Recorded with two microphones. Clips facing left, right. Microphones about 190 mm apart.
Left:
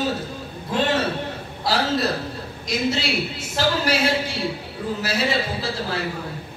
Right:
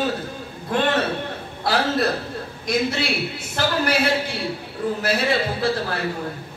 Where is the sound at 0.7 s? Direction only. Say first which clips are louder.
Right 1 dB; 60° right (ahead or behind).